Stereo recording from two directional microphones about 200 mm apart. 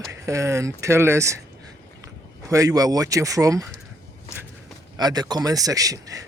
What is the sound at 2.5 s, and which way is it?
Speech, 15° right (ahead or behind).